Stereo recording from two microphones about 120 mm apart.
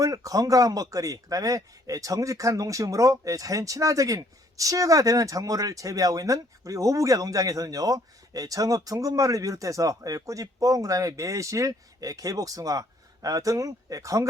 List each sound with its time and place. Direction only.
0.0 s speech: 30° right (ahead or behind)